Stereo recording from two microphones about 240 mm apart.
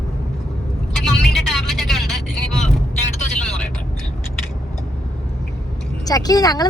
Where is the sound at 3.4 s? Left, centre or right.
Centre.